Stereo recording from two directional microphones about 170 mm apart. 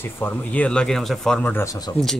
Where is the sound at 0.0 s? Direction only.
10° left (ahead or behind).